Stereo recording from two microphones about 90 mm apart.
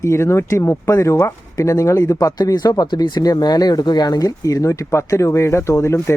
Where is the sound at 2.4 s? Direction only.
50° left (ahead or behind).